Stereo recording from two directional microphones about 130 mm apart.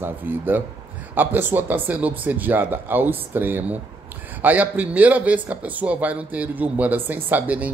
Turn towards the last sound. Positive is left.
turn(degrees=-10)  # may be behind; listen again after turning